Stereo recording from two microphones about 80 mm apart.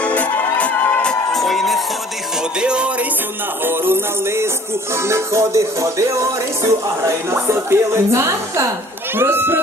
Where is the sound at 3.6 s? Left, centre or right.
Right.